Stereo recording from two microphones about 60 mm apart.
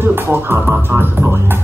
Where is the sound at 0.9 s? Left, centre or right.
Right.